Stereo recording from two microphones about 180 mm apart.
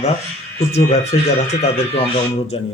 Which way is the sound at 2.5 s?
35° left (ahead or behind).